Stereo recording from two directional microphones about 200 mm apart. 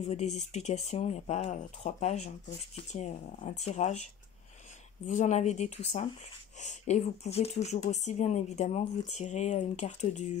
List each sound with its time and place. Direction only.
0.0 s speech: 35° left (ahead or behind)